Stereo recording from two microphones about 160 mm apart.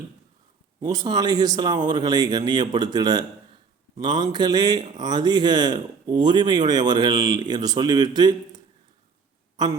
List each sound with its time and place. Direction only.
0.8 s speech: 25° right (ahead or behind)